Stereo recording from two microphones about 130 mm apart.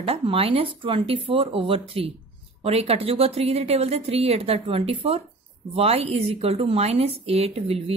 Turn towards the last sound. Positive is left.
turn(degrees=-50)  # may be behind; listen again after turning